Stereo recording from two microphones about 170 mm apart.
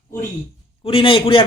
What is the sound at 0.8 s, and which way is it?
Speech, 30° left (ahead or behind).